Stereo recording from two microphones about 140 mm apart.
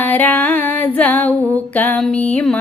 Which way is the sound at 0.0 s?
15° left (ahead or behind).